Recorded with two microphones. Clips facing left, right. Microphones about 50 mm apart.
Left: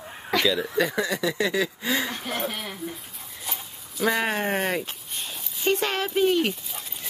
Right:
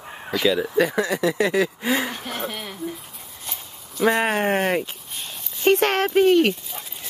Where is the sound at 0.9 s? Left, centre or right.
Centre.